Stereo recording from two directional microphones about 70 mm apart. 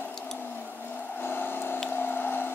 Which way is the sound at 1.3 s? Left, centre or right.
Left.